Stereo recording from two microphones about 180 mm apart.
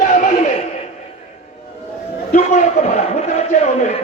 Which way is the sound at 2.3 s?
45° left (ahead or behind).